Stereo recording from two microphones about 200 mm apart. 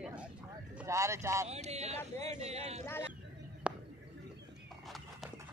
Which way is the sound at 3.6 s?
5° right (ahead or behind).